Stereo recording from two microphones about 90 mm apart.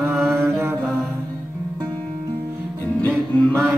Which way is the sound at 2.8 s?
15° left (ahead or behind).